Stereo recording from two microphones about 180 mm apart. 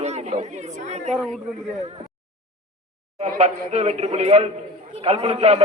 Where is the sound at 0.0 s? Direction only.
40° right (ahead or behind).